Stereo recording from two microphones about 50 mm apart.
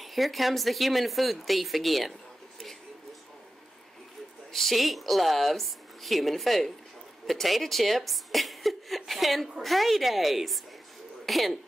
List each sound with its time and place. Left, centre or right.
0.0 s a woman's voice: centre
4.5 s a woman's voice: centre